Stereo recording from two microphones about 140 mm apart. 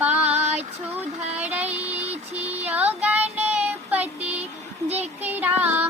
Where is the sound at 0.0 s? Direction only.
10° right (ahead or behind).